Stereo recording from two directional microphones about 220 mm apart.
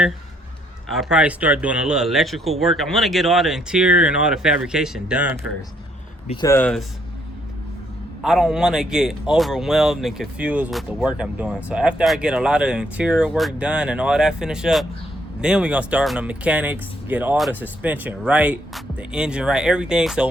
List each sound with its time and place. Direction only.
0.9 s a man's voice: 5° right (ahead or behind)
6.2 s speech: 20° left (ahead or behind)
8.2 s a man's voice: centre (ahead or behind)